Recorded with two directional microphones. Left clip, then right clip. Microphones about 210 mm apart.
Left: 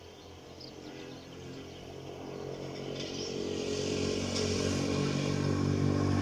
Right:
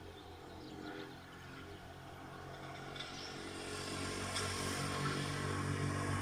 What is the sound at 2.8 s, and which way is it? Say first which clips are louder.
Vehicle: left 9 dB; 35° left (ahead or behind).